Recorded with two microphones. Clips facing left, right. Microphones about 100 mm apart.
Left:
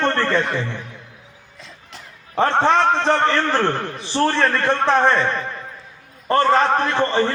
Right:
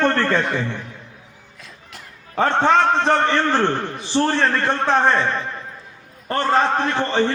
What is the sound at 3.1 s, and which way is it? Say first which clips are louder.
Speech: even; 20° right (ahead or behind).